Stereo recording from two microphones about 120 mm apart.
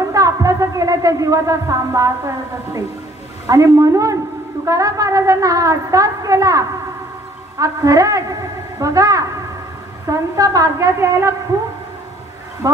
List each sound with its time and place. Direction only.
0.1 s a woman's voice: 30° right (ahead or behind)
12.6 s a woman's voice: 25° right (ahead or behind)